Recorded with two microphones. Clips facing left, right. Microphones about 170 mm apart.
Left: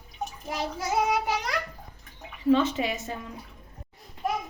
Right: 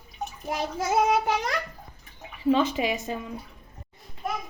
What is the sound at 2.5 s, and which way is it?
Speech, 15° right (ahead or behind).